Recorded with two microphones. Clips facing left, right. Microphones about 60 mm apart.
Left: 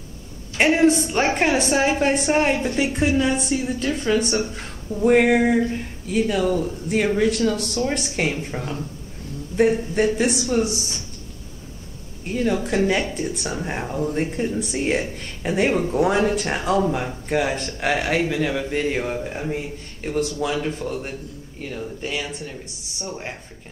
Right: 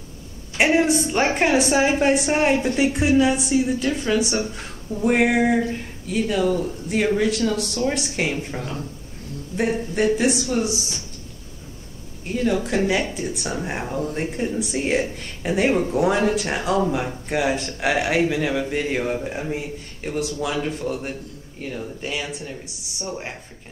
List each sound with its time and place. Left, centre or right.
0.6 s a woman's voice: centre
12.4 s speech: centre